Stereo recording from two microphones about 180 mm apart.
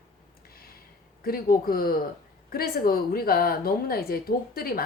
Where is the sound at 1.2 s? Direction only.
55° left (ahead or behind).